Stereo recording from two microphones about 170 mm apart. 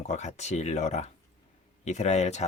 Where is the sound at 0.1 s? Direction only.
40° left (ahead or behind).